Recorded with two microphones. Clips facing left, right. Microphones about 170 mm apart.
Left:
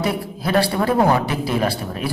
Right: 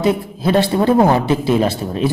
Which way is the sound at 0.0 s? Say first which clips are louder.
Right 6 dB; 25° right (ahead or behind).